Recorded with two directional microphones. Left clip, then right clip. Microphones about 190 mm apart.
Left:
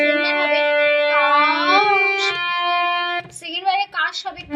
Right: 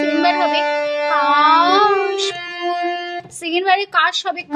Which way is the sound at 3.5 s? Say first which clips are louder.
Right 5 dB; 55° right (ahead or behind).